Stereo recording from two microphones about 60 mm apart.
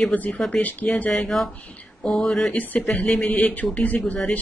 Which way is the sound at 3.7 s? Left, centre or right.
Left.